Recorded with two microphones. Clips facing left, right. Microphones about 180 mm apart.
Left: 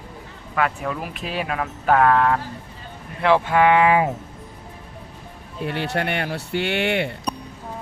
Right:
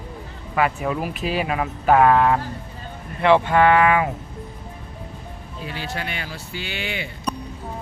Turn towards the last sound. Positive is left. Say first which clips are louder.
# left 8 dB
turn(degrees=65)  # may be behind; listen again after turning